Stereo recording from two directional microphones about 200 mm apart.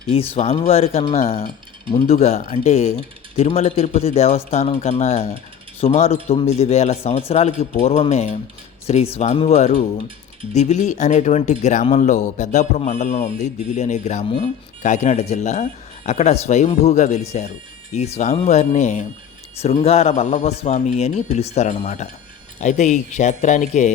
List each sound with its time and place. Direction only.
0.3 s a man's voice: 35° left (ahead or behind)